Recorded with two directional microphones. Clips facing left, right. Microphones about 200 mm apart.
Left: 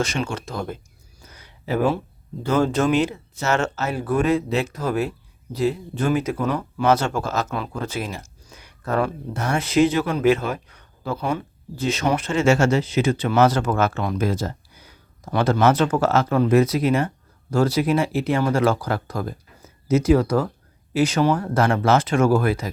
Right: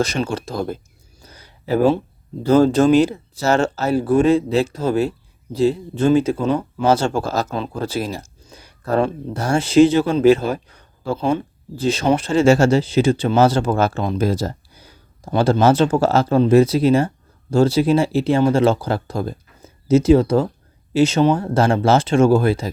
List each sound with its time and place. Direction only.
0.0 s speech: 35° right (ahead or behind)
1.3 s a sound: 35° right (ahead or behind)
2.5 s speech: 35° right (ahead or behind)